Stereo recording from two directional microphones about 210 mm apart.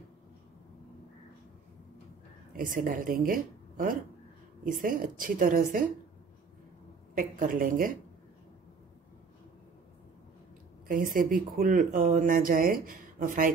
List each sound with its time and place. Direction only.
2.5 s a woman's voice: 40° right (ahead or behind)
7.2 s speech: 40° right (ahead or behind)
10.9 s speech: 40° right (ahead or behind)